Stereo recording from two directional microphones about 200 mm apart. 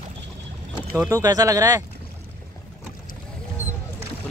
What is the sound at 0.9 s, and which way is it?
Speech, 15° right (ahead or behind).